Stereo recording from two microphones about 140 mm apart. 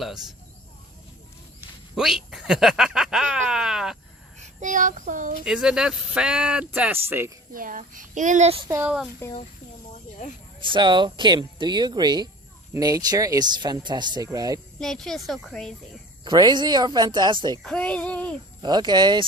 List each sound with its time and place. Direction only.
2.0 s speech: 5° right (ahead or behind)
4.4 s child singing: 65° right (ahead or behind)
5.5 s speech: 5° right (ahead or behind)
7.5 s a child's voice: 80° right; by 8.7 s 45° right (ahead or behind)
8.7 s speech: 15° right (ahead or behind)
9.2 s a child's voice: 15° left (ahead or behind)
10.6 s speech: 35° right (ahead or behind)
14.8 s speech: 5° left (ahead or behind)
16.2 s speech: 30° right (ahead or behind)
17.6 s a child's voice: 5° left (ahead or behind)
18.6 s speech: 30° right (ahead or behind)